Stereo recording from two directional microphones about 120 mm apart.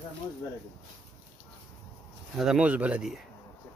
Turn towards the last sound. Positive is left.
turn(degrees=-5)  # may be behind; listen again after turning